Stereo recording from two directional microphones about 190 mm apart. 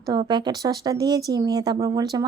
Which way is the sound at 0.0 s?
20° right (ahead or behind).